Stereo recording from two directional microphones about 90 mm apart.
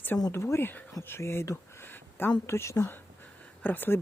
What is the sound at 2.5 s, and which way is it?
Speech, 30° left (ahead or behind).